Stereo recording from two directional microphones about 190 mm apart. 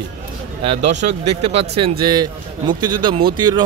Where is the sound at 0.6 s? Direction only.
35° right (ahead or behind).